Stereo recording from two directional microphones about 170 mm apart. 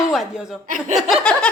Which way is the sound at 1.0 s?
5° left (ahead or behind).